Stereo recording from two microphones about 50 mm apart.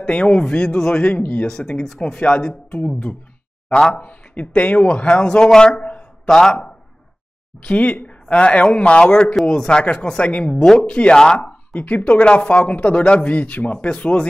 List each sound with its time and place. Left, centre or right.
0.0 s speech: left; by 6.6 s centre
7.6 s speech: left
11.4 s speech: left